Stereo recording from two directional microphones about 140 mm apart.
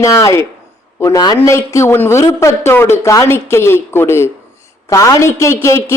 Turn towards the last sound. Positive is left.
turn(degrees=20)  # may be behind; listen again after turning